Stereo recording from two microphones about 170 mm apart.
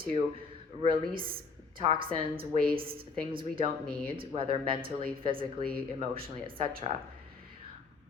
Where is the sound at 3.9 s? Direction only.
60° right (ahead or behind).